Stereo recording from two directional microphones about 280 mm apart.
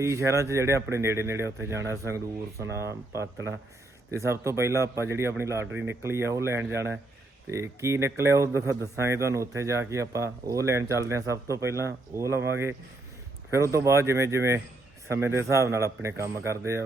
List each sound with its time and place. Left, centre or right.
0.0 s speech: centre
13.5 s speech: centre